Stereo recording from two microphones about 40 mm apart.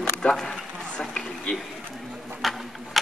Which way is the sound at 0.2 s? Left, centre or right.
Centre.